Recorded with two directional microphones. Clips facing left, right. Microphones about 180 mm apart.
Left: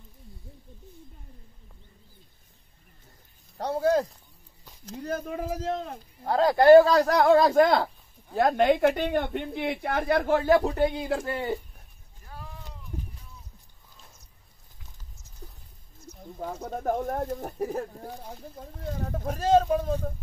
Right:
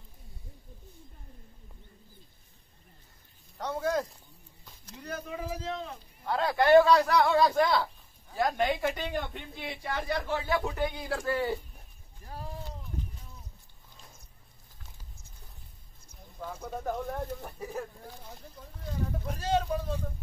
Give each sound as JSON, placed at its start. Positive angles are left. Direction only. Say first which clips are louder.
{"t": 3.5, "sound": "speech", "louder": "left 6 dB", "side_deg": 35}
{"t": 4.9, "sound": "speech", "louder": "left 6 dB", "side_deg": 45}
{"t": 12.3, "sound": "a sound", "louder": "right 3 dB", "side_deg": -35}
{"t": 16.4, "sound": "speech", "louder": "left 5 dB", "side_deg": 45}
{"t": 18.0, "sound": "speech", "louder": "left 7 dB", "side_deg": 50}